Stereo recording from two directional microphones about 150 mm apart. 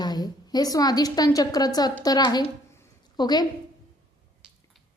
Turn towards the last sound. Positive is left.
turn(degrees=25)  # may be behind; listen again after turning